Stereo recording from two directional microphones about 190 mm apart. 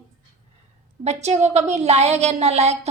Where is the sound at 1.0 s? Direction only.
35° right (ahead or behind).